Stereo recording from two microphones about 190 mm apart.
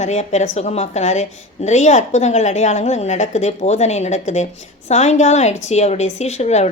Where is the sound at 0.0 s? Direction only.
35° left (ahead or behind).